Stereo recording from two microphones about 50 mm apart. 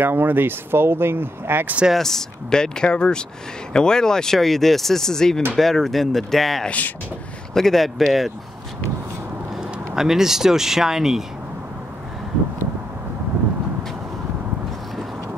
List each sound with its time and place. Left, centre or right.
0.0 s speech: right
2.0 s speech: centre
9.9 s speech: centre